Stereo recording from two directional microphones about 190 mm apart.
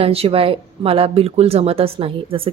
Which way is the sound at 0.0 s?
30° right (ahead or behind).